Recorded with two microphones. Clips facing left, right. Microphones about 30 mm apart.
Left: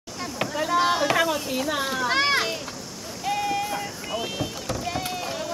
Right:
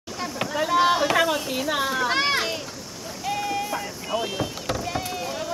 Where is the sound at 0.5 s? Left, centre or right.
Centre.